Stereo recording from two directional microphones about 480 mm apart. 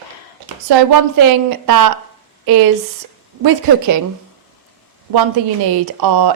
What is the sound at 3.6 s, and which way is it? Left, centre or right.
Speech, right.